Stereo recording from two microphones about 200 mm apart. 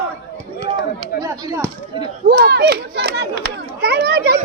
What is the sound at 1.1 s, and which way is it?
Speech, 15° right (ahead or behind).